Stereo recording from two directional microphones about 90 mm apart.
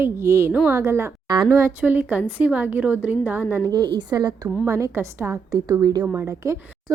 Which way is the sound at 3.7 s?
55° right (ahead or behind).